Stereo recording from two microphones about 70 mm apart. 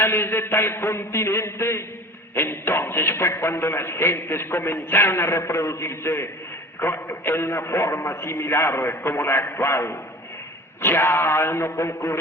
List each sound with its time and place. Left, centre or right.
0.0 s a man's voice: left